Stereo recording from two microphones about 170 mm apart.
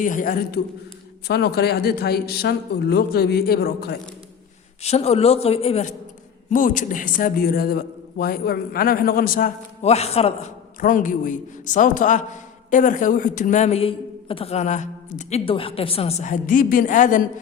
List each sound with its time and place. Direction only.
0.0 s a woman's voice: 50° left (ahead or behind)
1.3 s a man's voice: 70° left (ahead or behind)
4.8 s a man's voice: 40° left (ahead or behind)
6.5 s a man's voice: 50° left (ahead or behind)
9.8 s a man's voice: 40° left (ahead or behind)
10.8 s a woman's voice: 50° left (ahead or behind)
15.4 s a man's voice: 30° left (ahead or behind)
16.3 s a woman's voice: 55° left (ahead or behind)